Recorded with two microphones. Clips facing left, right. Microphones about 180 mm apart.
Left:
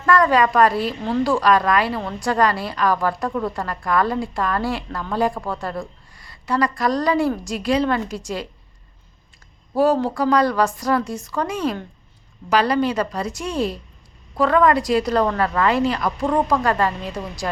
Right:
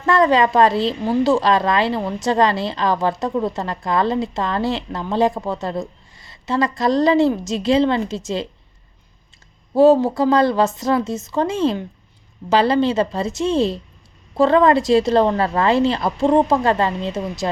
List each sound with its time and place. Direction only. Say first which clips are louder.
0.0 s a woman's voice: right 1 dB; 25° right (ahead or behind)
9.7 s a woman's voice: right 5 dB; 25° right (ahead or behind)